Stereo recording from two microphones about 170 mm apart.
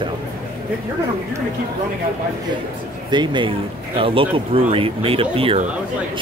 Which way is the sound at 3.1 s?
25° right (ahead or behind).